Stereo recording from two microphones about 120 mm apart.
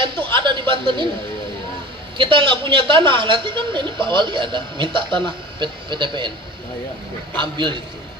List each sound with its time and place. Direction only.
0.0 s a sound: 45° right (ahead or behind)
2.1 s a woman's voice: 45° right (ahead or behind)
7.3 s a woman's voice: 40° right (ahead or behind)